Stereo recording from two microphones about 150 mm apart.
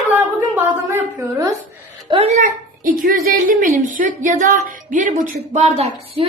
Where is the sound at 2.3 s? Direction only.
65° right (ahead or behind).